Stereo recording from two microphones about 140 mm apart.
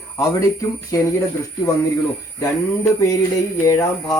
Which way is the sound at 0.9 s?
25° left (ahead or behind).